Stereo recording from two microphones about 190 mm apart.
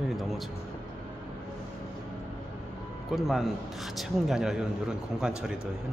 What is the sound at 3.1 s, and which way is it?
A man's voice, centre (ahead or behind).